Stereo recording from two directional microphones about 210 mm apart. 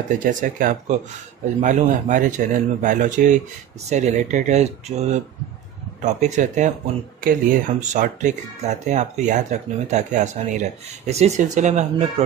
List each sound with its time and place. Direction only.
0.1 s speech: 40° right (ahead or behind)